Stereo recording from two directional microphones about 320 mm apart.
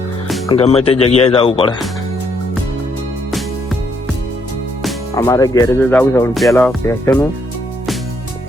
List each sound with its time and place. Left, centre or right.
0.4 s speech: centre
4.8 s speech: centre